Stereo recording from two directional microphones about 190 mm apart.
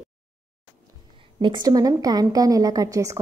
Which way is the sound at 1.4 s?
25° right (ahead or behind).